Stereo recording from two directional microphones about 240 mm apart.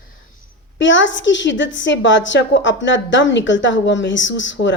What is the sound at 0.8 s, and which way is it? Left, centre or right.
A woman's voice, left.